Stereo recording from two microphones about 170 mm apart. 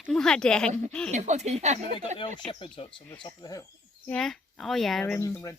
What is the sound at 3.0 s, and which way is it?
Speech, 25° left (ahead or behind).